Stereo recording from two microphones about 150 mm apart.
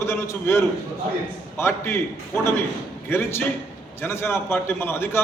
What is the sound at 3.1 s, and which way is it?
A man's voice, 15° left (ahead or behind).